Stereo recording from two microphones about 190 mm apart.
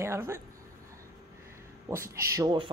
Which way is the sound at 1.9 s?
15° right (ahead or behind).